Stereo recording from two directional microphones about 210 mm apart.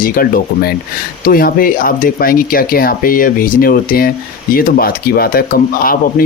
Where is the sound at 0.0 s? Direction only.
45° left (ahead or behind).